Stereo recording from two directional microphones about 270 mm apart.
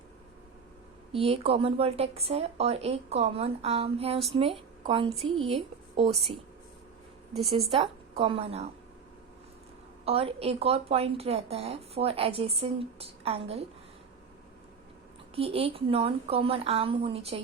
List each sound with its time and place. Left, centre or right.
1.1 s speech: right
7.7 s speech: centre
10.1 s speech: right
15.4 s speech: right